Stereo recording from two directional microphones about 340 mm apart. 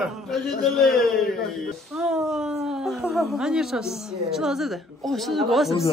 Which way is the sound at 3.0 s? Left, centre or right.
Centre.